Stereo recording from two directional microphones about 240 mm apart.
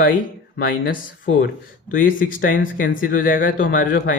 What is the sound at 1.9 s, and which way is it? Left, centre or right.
A man's voice, left.